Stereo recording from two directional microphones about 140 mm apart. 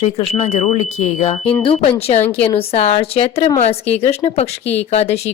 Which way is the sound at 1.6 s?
40° left (ahead or behind).